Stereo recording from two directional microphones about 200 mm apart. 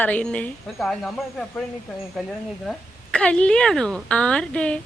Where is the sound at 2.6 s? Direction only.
5° left (ahead or behind).